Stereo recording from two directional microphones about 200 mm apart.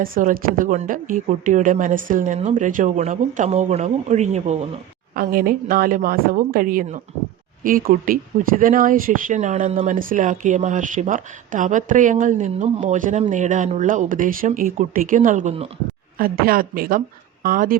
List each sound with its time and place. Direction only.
0.0 s speech: 45° right (ahead or behind)
5.1 s a woman's voice: 45° right (ahead or behind)
16.1 s a woman's voice: 45° right (ahead or behind)